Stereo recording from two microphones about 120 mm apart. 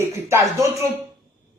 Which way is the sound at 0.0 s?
25° right (ahead or behind).